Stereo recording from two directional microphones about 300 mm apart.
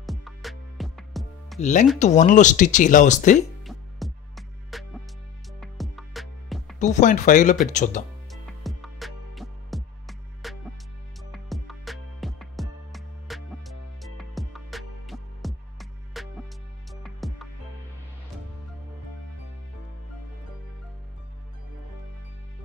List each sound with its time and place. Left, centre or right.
0.0 s music: centre
1.6 s speech: left
3.6 s music: centre
6.8 s speech: left
8.3 s music: centre